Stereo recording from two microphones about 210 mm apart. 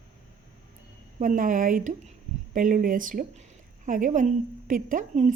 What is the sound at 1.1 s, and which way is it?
A woman's voice, 40° right (ahead or behind).